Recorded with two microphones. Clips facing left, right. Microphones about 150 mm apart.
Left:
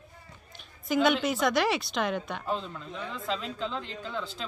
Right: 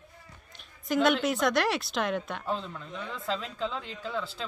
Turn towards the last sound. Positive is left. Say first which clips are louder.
# right 1 dB
turn(degrees=0)  # may be behind; listen again after turning